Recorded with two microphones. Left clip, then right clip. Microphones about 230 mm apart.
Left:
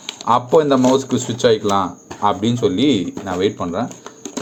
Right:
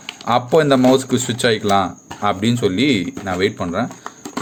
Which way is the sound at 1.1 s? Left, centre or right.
Right.